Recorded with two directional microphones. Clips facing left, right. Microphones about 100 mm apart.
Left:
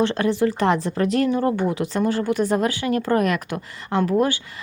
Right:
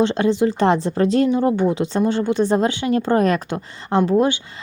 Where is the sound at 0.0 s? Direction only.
20° right (ahead or behind).